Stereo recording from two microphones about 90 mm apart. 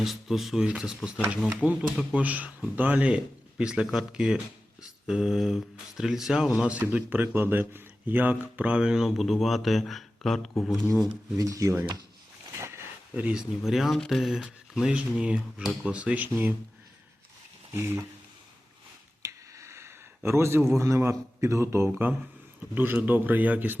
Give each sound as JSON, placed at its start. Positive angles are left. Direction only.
{"t": 0.0, "sound": "speech", "side_deg": 0}
{"t": 11.3, "sound": "speech", "side_deg": -40}
{"t": 12.5, "sound": "a sound", "side_deg": -30}
{"t": 13.1, "sound": "speech", "side_deg": -15}
{"t": 13.7, "sound": "speech", "side_deg": 0}
{"t": 17.7, "sound": "speech", "side_deg": -30}
{"t": 19.2, "sound": "speech", "side_deg": -35}